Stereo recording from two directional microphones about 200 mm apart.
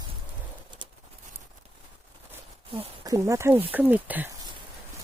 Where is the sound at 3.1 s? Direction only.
15° right (ahead or behind).